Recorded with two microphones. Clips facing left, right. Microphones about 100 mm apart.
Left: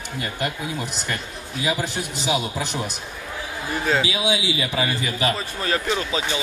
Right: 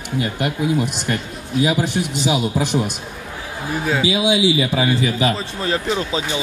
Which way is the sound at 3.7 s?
5° right (ahead or behind).